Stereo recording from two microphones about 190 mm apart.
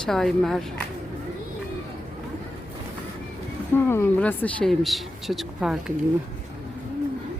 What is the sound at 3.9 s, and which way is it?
Speech, 10° left (ahead or behind).